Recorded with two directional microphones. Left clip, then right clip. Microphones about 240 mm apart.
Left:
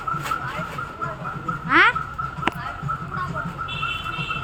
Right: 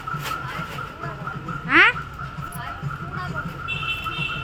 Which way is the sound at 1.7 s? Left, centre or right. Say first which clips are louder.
Right 1 dB; centre.